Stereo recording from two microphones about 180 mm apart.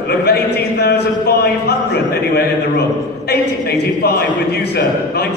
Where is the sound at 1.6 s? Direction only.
65° left (ahead or behind).